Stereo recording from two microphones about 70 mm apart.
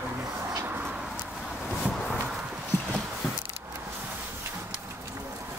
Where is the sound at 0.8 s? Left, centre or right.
Centre.